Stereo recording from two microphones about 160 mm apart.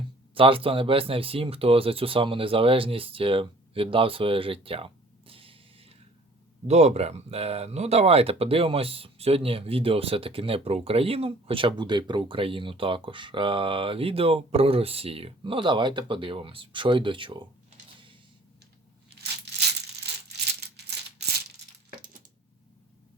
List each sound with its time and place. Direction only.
0.3 s speech: 35° right (ahead or behind)
19.5 s crumpling: 90° right
20.6 s a sound: 90° right